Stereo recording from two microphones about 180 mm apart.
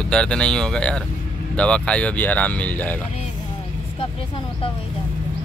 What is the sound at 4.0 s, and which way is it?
Speech, 30° left (ahead or behind).